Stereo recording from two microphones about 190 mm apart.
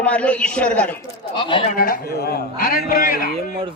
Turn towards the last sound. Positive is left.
turn(degrees=50)  # may be behind; listen again after turning